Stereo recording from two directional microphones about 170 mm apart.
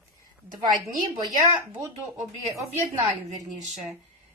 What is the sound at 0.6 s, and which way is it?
Speech, 25° right (ahead or behind).